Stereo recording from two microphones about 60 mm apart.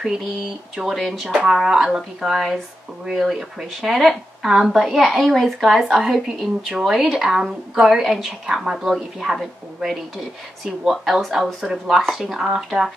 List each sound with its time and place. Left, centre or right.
0.0 s a woman's voice: centre